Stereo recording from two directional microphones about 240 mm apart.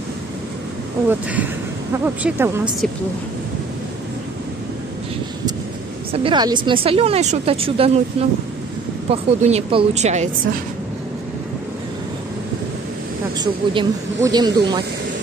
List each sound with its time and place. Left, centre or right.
1.0 s speech: centre
6.1 s speech: centre
13.4 s speech: centre